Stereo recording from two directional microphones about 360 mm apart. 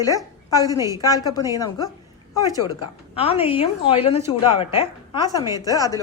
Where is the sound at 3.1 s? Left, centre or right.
Centre.